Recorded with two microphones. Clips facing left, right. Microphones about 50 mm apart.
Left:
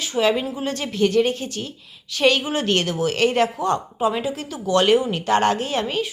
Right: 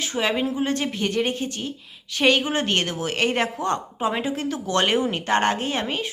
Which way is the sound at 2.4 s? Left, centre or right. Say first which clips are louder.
Even; right.